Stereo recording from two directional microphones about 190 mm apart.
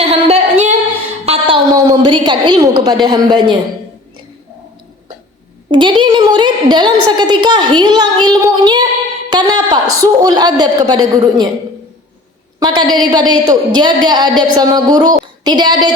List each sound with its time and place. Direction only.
0.0 s a sound: 35° right (ahead or behind)
1.7 s a woman's voice: 20° right (ahead or behind)
5.7 s a woman's voice: 25° right (ahead or behind)
12.5 s a woman's voice: 20° right (ahead or behind)